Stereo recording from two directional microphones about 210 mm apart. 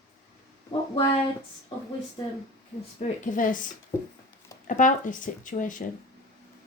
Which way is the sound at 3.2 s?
40° left (ahead or behind).